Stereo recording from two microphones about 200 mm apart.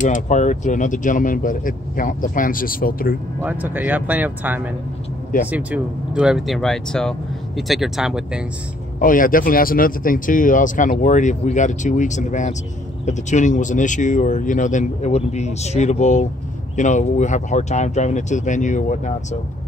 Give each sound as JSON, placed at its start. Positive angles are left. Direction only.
{"t": 0.0, "sound": "speech", "side_deg": 40}
{"t": 3.4, "sound": "speech", "side_deg": -10}
{"t": 9.0, "sound": "speech", "side_deg": 45}